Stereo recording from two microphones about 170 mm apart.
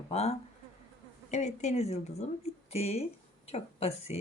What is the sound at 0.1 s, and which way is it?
Speech, 35° left (ahead or behind).